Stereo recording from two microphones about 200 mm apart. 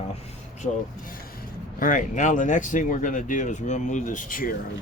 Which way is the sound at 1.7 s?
45° left (ahead or behind).